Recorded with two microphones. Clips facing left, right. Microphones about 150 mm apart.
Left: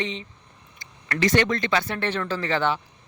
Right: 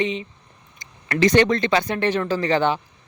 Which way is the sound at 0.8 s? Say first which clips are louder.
Right 5 dB; 20° right (ahead or behind).